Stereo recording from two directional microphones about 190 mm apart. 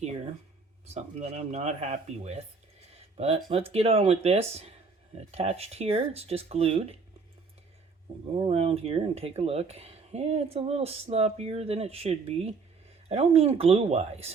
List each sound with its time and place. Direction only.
0.9 s speech: 35° right (ahead or behind)
2.9 s a sound: 30° right (ahead or behind)
3.7 s speech: 30° right (ahead or behind)
8.4 s speech: 30° right (ahead or behind)